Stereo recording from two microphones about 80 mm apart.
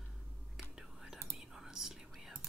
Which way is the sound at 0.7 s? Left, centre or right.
Centre.